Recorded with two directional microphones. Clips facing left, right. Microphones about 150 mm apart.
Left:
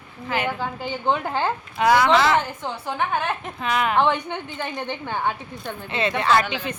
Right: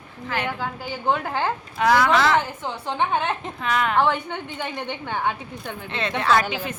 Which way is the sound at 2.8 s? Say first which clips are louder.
Right 2 dB; 25° right (ahead or behind).